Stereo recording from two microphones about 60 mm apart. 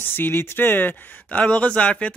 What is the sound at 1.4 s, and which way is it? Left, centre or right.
Speech, left.